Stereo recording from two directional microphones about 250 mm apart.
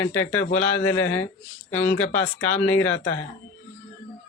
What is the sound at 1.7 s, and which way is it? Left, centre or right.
Speech, centre.